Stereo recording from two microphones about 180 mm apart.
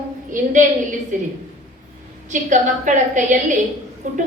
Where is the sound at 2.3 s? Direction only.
45° right (ahead or behind).